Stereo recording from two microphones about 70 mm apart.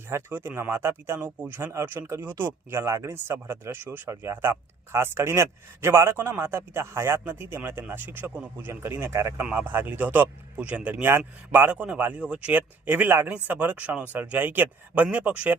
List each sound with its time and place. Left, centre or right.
0.1 s speech: right
9.4 s speech: right